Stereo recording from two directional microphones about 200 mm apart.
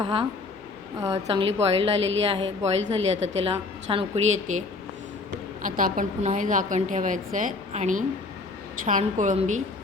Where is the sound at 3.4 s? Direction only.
30° right (ahead or behind).